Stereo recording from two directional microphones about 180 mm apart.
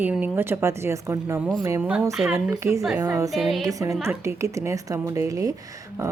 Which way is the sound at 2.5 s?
15° right (ahead or behind).